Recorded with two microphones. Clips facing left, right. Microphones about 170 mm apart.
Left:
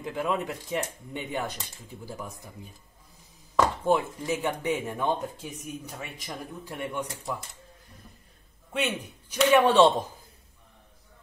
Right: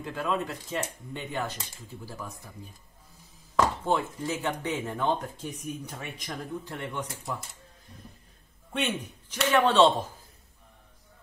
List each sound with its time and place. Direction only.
0.0 s speech: 15° left (ahead or behind)
3.5 s speech: 15° left (ahead or behind)
8.7 s speech: 10° left (ahead or behind)